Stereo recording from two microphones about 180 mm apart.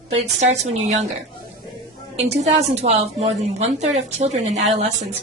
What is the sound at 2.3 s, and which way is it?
A woman's voice, 35° right (ahead or behind).